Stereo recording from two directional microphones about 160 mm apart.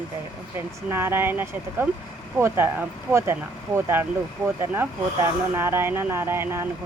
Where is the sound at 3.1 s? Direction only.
15° right (ahead or behind).